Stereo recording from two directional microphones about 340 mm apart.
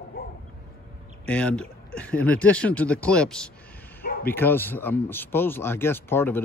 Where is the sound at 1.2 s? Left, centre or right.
Centre.